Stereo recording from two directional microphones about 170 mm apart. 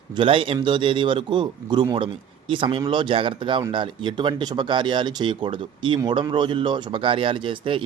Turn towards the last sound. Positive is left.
turn(degrees=-30)  # may be behind; listen again after turning